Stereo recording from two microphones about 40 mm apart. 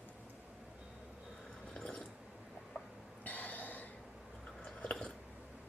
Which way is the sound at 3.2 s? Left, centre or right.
Left.